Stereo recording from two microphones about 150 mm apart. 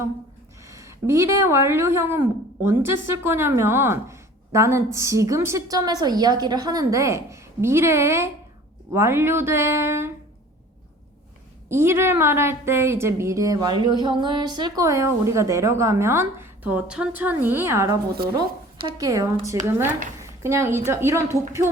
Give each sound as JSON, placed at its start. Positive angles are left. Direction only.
{"t": 0.6, "sound": "a woman's voice", "side_deg": -20}
{"t": 11.7, "sound": "a woman's voice", "side_deg": -15}